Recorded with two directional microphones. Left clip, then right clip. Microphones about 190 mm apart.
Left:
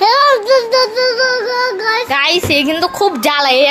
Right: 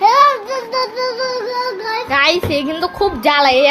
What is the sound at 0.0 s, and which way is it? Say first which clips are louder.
Child singing: left 1 dB; 55° left (ahead or behind).